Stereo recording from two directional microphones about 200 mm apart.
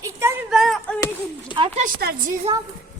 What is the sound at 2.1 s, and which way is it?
Speech, 50° right (ahead or behind).